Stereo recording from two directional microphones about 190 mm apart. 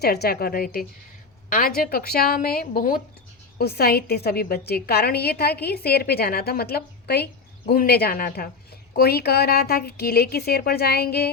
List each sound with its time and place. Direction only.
0.0 s a woman's voice: 55° left (ahead or behind)